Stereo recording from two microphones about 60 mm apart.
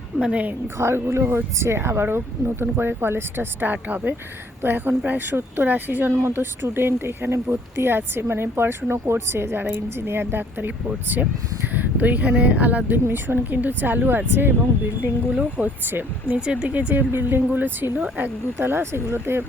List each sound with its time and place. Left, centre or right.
0.2 s speech: right
0.8 s speech: right
15.4 s speech: right
15.9 s speech: right
17.1 s speech: right